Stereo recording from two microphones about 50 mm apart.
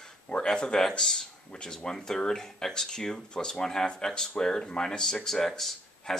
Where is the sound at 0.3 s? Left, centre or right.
Centre.